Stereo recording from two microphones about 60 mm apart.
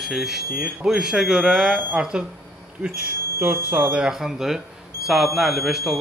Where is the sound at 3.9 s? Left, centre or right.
Centre.